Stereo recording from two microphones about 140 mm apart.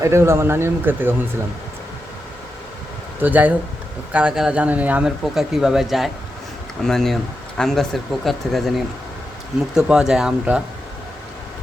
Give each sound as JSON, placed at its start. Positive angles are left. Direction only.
{"t": 0.0, "sound": "speech", "side_deg": -20}
{"t": 3.2, "sound": "speech", "side_deg": -10}